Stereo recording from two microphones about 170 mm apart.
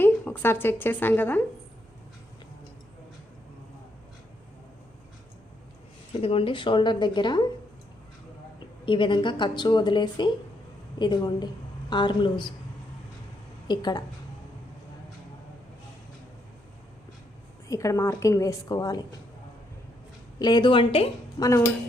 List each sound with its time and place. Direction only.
0.0 s speech: 10° left (ahead or behind)
6.2 s a woman's voice: 35° left (ahead or behind)
8.9 s a woman's voice: 30° left (ahead or behind)
13.7 s a woman's voice: 25° left (ahead or behind)
17.7 s a woman's voice: 20° left (ahead or behind)
20.4 s a woman's voice: 25° left (ahead or behind)